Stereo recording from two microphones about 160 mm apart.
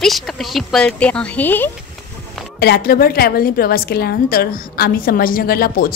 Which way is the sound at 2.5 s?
75° left (ahead or behind).